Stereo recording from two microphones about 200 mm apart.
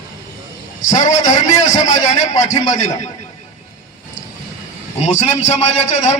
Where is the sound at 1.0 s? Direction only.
35° left (ahead or behind).